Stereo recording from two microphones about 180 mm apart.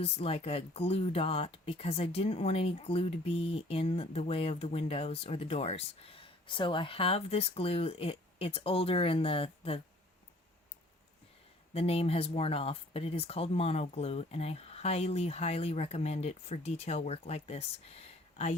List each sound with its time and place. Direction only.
0.0 s speech: 30° left (ahead or behind)
11.7 s speech: 35° left (ahead or behind)